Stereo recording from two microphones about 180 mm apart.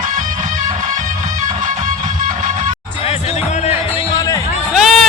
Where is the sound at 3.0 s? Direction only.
35° left (ahead or behind).